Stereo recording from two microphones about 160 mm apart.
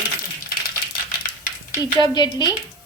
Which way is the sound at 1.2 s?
60° left (ahead or behind).